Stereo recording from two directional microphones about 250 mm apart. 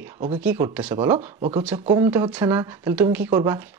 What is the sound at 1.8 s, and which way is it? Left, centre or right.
Speech, right.